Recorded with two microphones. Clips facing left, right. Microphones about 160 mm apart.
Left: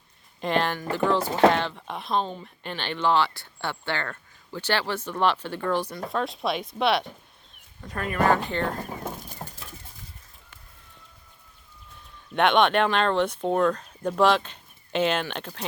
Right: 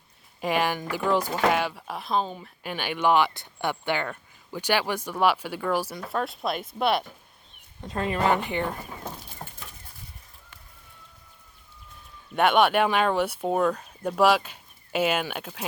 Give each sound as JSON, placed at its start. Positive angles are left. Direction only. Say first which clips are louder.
{"t": 0.4, "sound": "speech", "louder": "even", "side_deg": -10}
{"t": 7.8, "sound": "speech", "louder": "even", "side_deg": -25}
{"t": 12.3, "sound": "speech", "louder": "even", "side_deg": -5}